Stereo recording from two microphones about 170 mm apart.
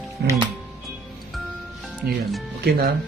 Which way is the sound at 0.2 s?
70° right (ahead or behind).